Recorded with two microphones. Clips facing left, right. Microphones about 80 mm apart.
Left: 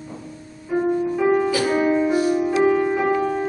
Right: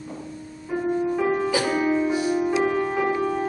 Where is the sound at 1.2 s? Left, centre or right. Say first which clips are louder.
Left 4 dB; centre.